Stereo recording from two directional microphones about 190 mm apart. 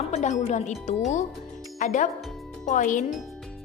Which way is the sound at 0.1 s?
35° left (ahead or behind).